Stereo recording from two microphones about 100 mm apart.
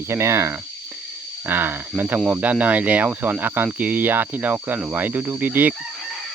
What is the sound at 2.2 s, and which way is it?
Speech, 15° right (ahead or behind).